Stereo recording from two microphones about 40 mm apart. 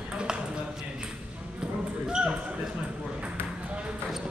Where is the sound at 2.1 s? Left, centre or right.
Right.